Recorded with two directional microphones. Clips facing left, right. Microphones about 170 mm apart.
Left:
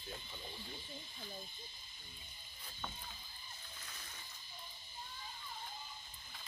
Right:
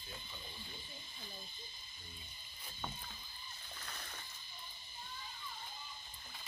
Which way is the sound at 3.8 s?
65° right (ahead or behind).